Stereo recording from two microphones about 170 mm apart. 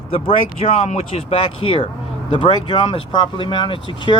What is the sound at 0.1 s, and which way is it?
Speech, 35° left (ahead or behind).